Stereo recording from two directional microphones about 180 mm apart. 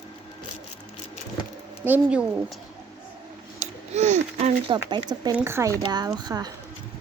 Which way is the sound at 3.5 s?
40° right (ahead or behind).